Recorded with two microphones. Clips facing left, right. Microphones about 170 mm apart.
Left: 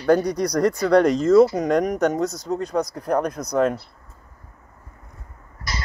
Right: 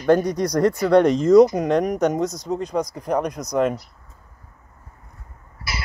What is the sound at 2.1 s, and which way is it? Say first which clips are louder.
A man's voice: even; 5° left (ahead or behind).